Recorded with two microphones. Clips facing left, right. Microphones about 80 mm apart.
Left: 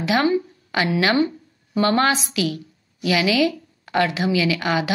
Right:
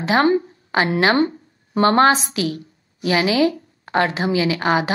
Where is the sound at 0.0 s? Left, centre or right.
Right.